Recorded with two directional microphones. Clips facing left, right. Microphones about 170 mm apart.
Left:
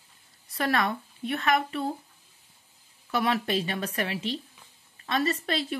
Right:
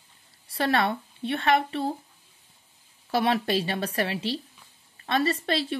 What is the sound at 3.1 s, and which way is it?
Speech, 30° right (ahead or behind).